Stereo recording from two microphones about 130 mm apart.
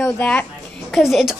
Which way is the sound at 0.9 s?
Centre (ahead or behind).